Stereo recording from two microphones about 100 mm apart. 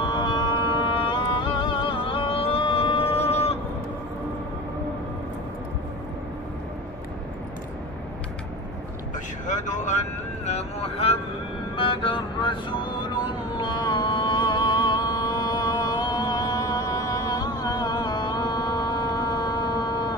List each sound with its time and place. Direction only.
0.0 s music: 50° left (ahead or behind); by 3.5 s 90° left
10.4 s vehicle: 85° left
11.7 s music: 60° left (ahead or behind); by 20.2 s 45° left (ahead or behind)